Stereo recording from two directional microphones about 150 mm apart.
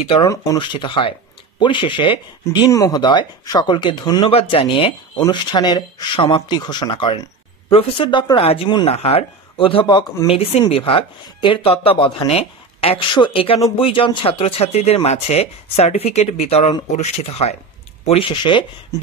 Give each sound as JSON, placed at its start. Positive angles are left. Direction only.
{"t": 0.2, "sound": "speech", "side_deg": 20}
{"t": 0.6, "sound": "speech", "side_deg": 30}